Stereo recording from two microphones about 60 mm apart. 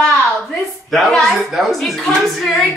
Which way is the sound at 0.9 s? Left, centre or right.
Centre.